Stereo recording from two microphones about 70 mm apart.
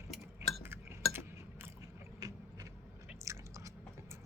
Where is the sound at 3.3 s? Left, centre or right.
Right.